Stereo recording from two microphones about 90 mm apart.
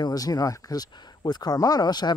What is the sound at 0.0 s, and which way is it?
Speech, 45° left (ahead or behind).